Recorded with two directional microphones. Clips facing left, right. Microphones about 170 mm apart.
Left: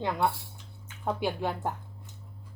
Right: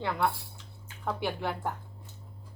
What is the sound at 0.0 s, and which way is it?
A woman's voice, 15° left (ahead or behind).